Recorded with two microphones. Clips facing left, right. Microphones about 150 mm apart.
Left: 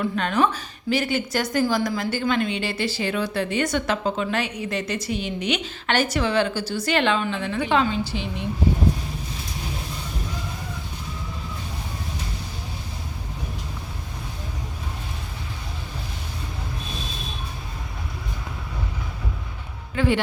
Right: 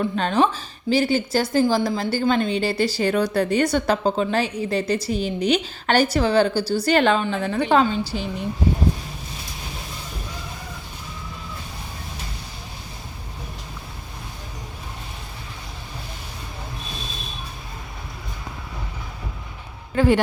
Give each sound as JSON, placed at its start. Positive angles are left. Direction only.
{"t": 0.2, "sound": "a woman's voice", "side_deg": -30}
{"t": 20.0, "sound": "speech", "side_deg": -45}